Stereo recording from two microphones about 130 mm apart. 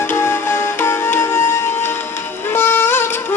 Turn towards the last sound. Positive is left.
turn(degrees=20)  # may be behind; listen again after turning